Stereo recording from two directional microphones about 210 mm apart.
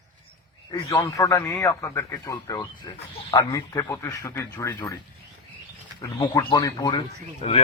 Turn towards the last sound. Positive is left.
turn(degrees=25)  # may be behind; listen again after turning